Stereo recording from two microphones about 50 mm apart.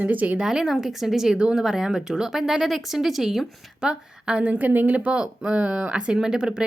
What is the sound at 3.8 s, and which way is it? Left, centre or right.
Speech, centre.